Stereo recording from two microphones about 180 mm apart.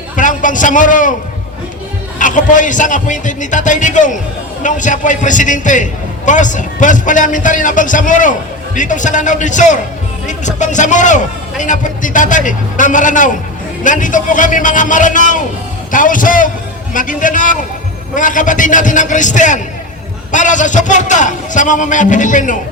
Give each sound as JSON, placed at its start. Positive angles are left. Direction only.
{"t": 0.2, "sound": "a man's voice", "side_deg": 45}
{"t": 2.1, "sound": "a man's voice", "side_deg": 45}